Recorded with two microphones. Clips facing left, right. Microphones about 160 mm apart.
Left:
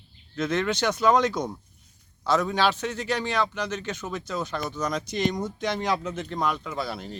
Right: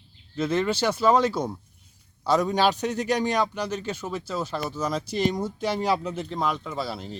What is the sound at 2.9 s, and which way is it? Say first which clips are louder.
Speech: right 4 dB; 40° right (ahead or behind).